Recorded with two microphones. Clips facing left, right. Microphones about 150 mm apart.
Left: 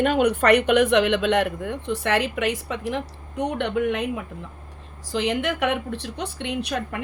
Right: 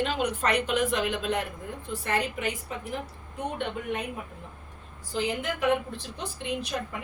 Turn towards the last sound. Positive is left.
turn(degrees=70)  # may be behind; listen again after turning